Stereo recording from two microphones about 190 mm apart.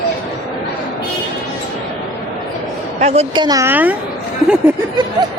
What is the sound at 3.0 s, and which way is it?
Speech, 35° right (ahead or behind).